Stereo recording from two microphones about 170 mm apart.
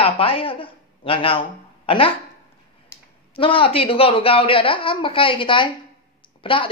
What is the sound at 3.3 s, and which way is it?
Speech, 30° left (ahead or behind).